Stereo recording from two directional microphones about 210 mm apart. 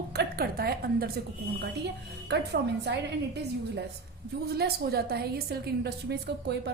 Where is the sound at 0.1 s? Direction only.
50° right (ahead or behind).